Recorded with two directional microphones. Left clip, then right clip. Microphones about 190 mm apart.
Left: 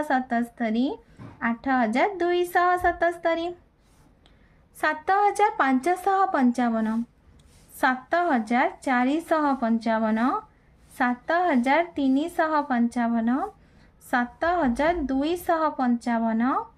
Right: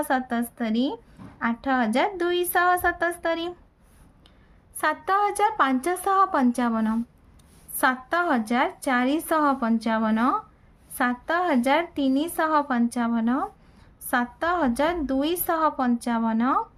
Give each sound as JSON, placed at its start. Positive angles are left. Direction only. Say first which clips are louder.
{"t": 0.0, "sound": "a woman's voice", "louder": "left 1 dB", "side_deg": -25}
{"t": 4.8, "sound": "a woman's voice", "louder": "left 1 dB", "side_deg": -10}